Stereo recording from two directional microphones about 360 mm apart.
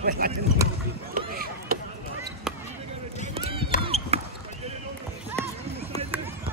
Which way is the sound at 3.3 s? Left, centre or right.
Centre.